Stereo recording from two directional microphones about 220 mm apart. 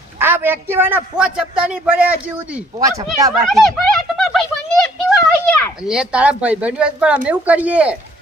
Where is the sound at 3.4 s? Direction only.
Centre (ahead or behind).